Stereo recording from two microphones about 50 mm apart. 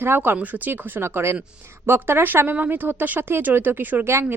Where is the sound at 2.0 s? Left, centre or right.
Right.